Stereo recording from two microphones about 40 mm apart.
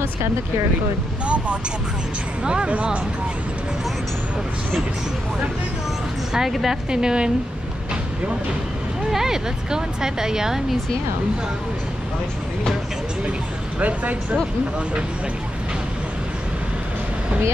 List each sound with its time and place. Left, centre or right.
1.2 s speech: right
6.3 s speech: centre
6.9 s speech: centre
9.1 s speech: centre
13.7 s speech: right